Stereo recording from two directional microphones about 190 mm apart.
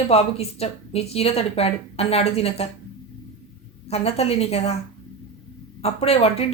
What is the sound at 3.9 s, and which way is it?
Speech, 30° left (ahead or behind).